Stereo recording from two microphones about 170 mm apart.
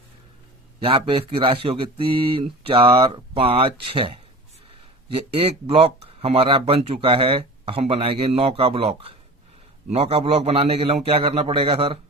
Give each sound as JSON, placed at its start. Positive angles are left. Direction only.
{"t": 0.8, "sound": "speech", "side_deg": -30}